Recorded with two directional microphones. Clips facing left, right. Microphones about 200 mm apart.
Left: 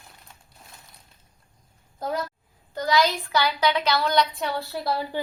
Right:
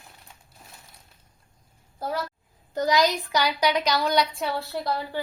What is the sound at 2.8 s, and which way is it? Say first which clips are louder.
A woman's voice: right 1 dB; 20° right (ahead or behind).